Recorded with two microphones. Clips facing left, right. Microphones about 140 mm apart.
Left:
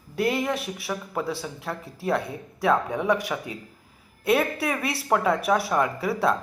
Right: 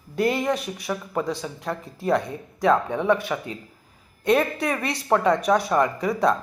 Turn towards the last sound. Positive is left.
turn(degrees=5)  # may be behind; listen again after turning